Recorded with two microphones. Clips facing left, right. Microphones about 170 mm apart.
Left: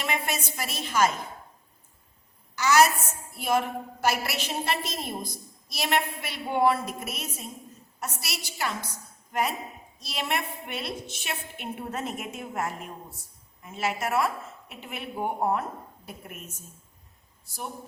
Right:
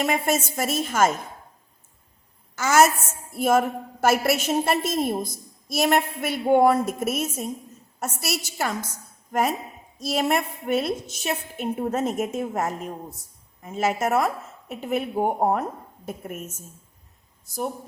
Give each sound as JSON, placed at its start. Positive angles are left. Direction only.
{"t": 0.0, "sound": "a woman's voice", "side_deg": -45}
{"t": 2.6, "sound": "a woman's voice", "side_deg": -50}